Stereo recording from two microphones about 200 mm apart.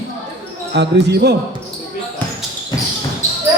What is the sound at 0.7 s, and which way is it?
Speech, 55° right (ahead or behind).